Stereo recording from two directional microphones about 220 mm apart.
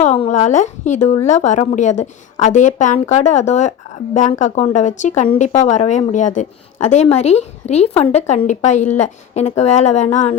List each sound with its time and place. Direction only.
0.0 s speech: 30° left (ahead or behind)